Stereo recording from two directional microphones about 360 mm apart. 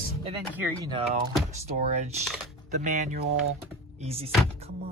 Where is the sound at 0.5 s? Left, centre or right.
Centre.